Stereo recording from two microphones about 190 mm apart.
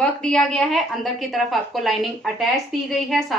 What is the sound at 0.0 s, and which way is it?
A woman's voice, 5° left (ahead or behind).